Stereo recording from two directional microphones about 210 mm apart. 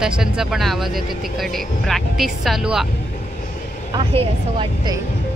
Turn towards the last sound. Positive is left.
turn(degrees=-20)  # may be behind; listen again after turning